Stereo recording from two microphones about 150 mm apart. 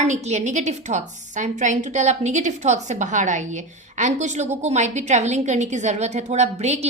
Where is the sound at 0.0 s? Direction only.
50° right (ahead or behind).